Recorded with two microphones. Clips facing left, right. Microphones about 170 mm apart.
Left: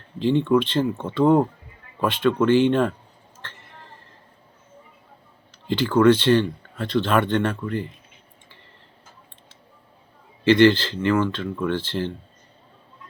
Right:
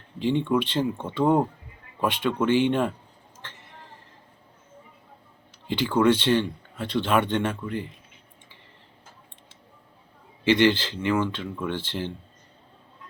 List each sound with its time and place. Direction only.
0.2 s speech: 15° right (ahead or behind)
3.4 s a sound: 15° right (ahead or behind)
5.6 s speech: 10° right (ahead or behind)
10.5 s speech: 10° right (ahead or behind)